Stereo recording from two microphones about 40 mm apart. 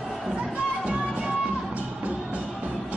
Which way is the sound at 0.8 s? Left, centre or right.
Right.